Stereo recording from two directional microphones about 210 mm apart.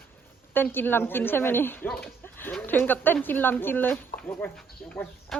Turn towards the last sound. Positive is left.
turn(degrees=0)  # may be behind; listen again after turning